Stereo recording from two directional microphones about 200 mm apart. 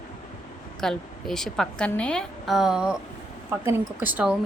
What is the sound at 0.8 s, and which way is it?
Speech, centre (ahead or behind).